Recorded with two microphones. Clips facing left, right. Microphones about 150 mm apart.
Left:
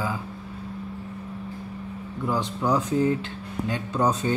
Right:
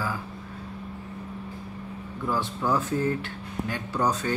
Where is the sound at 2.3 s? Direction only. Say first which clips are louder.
Left 2 dB; 15° left (ahead or behind).